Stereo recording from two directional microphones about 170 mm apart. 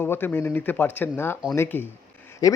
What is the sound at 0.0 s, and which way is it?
Speech, 10° left (ahead or behind).